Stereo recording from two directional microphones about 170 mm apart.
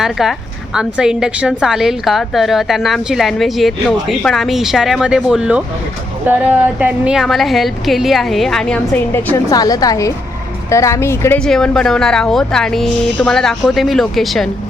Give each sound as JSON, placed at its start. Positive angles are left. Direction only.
{"t": 0.0, "sound": "a woman's voice", "side_deg": 0}
{"t": 11.3, "sound": "speech", "side_deg": 5}